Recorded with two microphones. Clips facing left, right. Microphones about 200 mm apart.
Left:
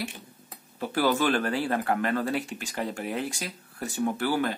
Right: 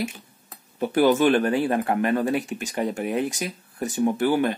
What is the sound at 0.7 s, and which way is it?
Speech, 20° right (ahead or behind).